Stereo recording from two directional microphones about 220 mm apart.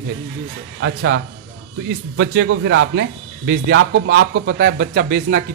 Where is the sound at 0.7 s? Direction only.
60° right (ahead or behind).